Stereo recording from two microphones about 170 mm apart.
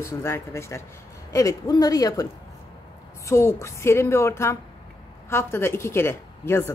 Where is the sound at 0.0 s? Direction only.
15° left (ahead or behind).